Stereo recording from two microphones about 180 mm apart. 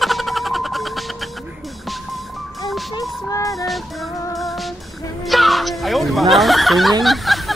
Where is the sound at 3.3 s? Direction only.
20° left (ahead or behind).